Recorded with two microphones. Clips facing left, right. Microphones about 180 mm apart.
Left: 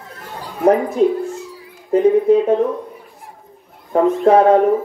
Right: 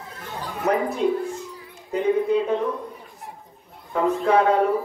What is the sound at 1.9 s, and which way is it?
Speech, 45° left (ahead or behind).